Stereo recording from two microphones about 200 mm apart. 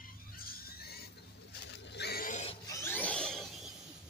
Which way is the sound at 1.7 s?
60° left (ahead or behind).